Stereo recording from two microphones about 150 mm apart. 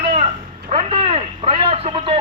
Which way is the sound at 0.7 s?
40° right (ahead or behind).